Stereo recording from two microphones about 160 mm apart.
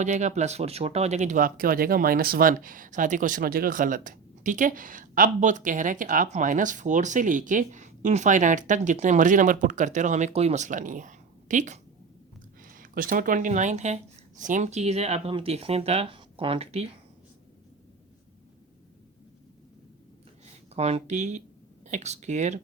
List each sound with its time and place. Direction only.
0.0 s speech: 50° right (ahead or behind)
20.7 s speech: 40° right (ahead or behind)